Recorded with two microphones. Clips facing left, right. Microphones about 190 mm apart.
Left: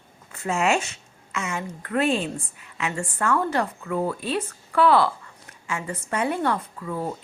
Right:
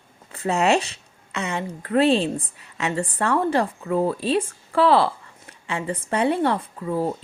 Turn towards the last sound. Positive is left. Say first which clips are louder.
# right 5 dB
turn(degrees=-30)  # may be behind; listen again after turning